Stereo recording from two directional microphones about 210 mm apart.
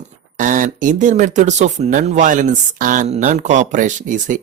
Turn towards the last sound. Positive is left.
turn(degrees=-40)  # may be behind; listen again after turning